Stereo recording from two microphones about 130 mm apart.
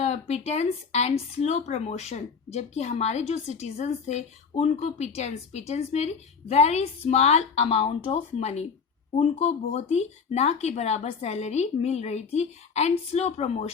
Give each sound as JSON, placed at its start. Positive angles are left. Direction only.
{"t": 0.0, "sound": "speech", "side_deg": 55}